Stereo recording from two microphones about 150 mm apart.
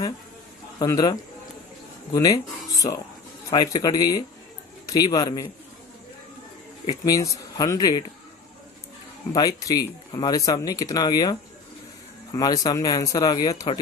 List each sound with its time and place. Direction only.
0.8 s speech: 25° left (ahead or behind)
6.8 s speech: 25° left (ahead or behind)
9.6 s speech: 25° left (ahead or behind)